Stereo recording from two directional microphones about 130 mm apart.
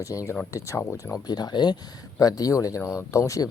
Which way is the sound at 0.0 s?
25° left (ahead or behind).